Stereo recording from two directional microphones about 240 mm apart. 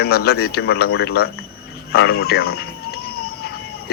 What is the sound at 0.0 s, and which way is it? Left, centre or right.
Speech, left.